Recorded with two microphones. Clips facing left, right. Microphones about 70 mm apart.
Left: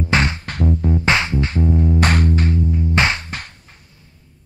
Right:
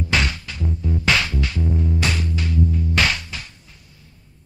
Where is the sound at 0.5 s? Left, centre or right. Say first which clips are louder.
Left 7 dB; left.